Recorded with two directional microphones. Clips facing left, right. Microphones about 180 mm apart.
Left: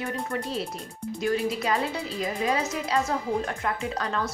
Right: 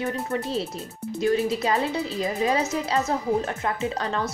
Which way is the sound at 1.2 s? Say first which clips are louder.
Right 4 dB; 25° right (ahead or behind).